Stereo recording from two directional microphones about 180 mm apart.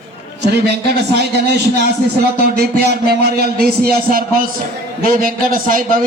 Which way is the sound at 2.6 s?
65° right (ahead or behind).